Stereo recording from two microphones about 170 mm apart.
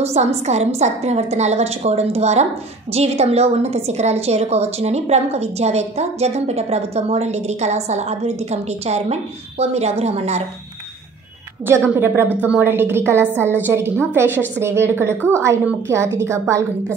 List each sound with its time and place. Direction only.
0.0 s a woman's voice: 40° right (ahead or behind)
11.9 s a woman's voice: 10° right (ahead or behind)